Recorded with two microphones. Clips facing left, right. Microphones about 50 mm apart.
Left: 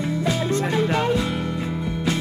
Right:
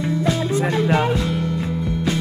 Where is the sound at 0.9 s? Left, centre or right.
Centre.